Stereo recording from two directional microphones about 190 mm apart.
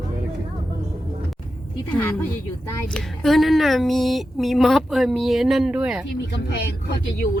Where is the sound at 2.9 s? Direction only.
5° left (ahead or behind).